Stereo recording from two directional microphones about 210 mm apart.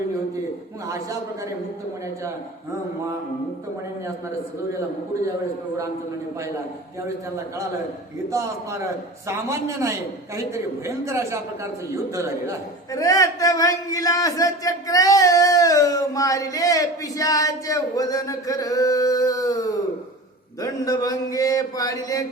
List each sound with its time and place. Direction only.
9.2 s a man's voice: 15° right (ahead or behind)
12.9 s a man's voice: 15° left (ahead or behind)